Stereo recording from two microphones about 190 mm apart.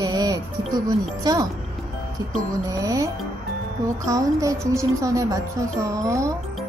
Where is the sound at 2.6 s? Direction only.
20° right (ahead or behind).